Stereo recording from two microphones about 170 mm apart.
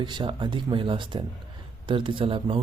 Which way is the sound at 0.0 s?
25° right (ahead or behind).